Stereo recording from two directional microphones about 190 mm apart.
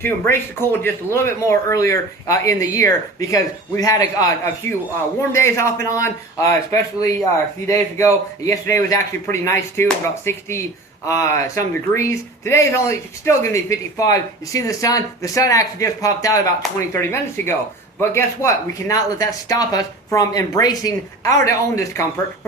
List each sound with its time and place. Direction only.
0.0 s speech: 10° left (ahead or behind)